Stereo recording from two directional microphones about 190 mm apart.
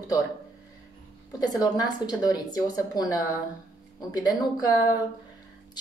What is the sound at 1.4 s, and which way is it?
Speech, 20° left (ahead or behind).